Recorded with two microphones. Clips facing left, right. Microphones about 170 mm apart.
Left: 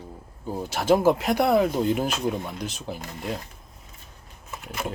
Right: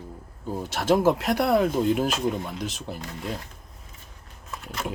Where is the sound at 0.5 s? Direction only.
Centre (ahead or behind).